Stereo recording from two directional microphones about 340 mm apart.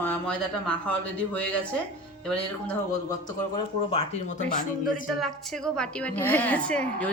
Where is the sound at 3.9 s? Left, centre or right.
Left.